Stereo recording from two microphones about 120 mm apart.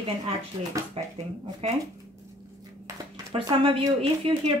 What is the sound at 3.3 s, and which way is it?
Speech, 50° right (ahead or behind).